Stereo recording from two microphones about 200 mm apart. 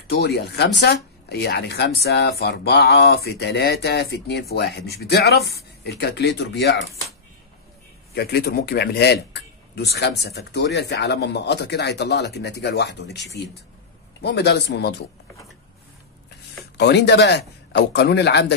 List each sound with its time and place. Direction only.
0.1 s speech: 55° left (ahead or behind)
8.1 s speech: 55° left (ahead or behind)
16.7 s speech: 55° left (ahead or behind)